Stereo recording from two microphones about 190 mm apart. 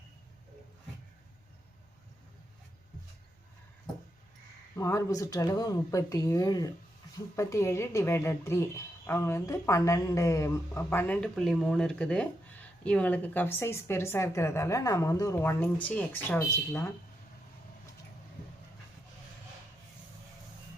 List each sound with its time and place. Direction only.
4.8 s a woman's voice: 15° left (ahead or behind)